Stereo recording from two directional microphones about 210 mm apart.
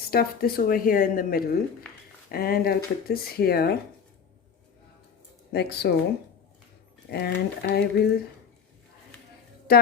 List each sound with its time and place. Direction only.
0.1 s speech: 45° left (ahead or behind)
5.5 s speech: 50° left (ahead or behind)
7.1 s speech: 50° left (ahead or behind)